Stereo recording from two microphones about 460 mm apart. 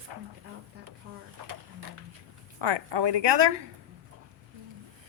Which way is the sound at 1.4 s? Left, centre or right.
Right.